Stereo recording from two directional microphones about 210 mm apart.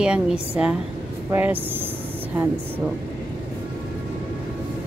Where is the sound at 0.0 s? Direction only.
5° right (ahead or behind).